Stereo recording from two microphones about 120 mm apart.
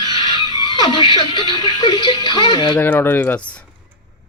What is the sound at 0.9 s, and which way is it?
Speech, 40° left (ahead or behind).